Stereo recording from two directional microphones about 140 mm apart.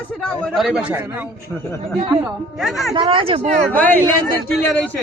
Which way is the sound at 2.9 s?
35° right (ahead or behind).